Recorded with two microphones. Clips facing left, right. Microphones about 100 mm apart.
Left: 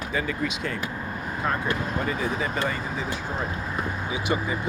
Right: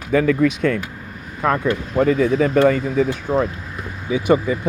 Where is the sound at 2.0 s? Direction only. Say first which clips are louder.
Right 11 dB; 90° right; by 3.4 s 75° right (ahead or behind).